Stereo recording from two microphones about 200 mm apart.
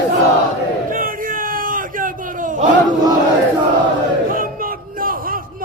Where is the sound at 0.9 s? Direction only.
45° right (ahead or behind).